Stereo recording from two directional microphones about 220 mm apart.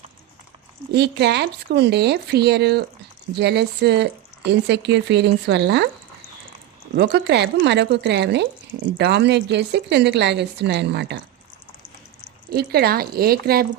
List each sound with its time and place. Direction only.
0.9 s a woman's voice: 50° right (ahead or behind)
6.9 s a woman's voice: 50° right (ahead or behind)
12.5 s a woman's voice: 45° right (ahead or behind)